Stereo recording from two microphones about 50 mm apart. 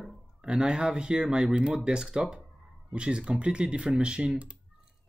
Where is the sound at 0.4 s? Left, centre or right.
Centre.